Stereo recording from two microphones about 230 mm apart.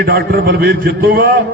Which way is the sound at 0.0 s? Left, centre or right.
Right.